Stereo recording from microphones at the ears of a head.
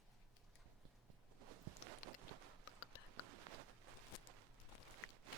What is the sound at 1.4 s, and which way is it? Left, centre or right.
Walk, right.